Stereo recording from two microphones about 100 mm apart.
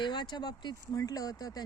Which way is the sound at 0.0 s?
50° left (ahead or behind).